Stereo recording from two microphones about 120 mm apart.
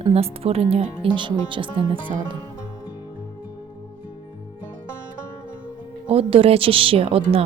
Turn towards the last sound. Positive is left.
turn(degrees=-55)  # may be behind; listen again after turning